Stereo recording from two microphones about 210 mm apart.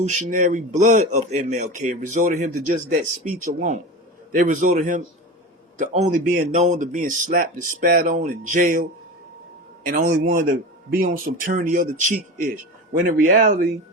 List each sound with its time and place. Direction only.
0.0 s a man's voice: 35° right (ahead or behind)